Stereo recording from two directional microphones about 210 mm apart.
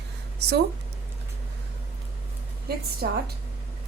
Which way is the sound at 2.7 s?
50° right (ahead or behind).